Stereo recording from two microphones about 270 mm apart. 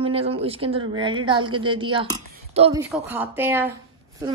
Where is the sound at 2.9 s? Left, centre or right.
Centre.